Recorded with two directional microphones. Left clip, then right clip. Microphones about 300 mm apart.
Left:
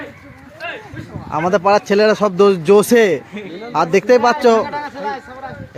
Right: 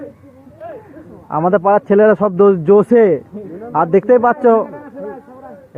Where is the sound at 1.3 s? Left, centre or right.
Centre.